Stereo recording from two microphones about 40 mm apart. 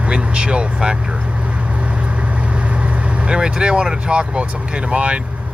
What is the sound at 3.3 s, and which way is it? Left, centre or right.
Speech, right.